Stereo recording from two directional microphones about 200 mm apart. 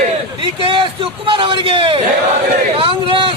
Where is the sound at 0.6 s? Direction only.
25° right (ahead or behind).